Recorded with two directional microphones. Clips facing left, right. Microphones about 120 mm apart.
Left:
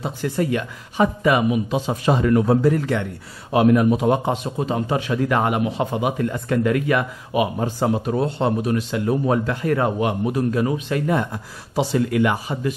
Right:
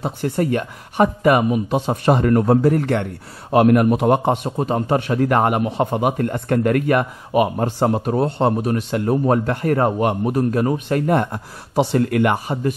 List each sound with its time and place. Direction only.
0.0 s a man's voice: 45° right (ahead or behind); by 4.2 s 60° right (ahead or behind)
4.6 s speech: 45° right (ahead or behind)